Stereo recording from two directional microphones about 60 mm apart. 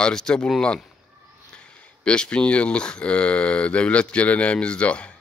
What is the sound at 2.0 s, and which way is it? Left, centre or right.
Speech, centre.